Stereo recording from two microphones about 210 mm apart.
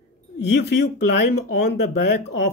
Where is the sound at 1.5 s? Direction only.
50° left (ahead or behind).